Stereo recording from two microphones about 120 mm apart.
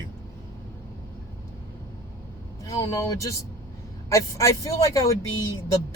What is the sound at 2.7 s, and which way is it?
Speech, 25° left (ahead or behind).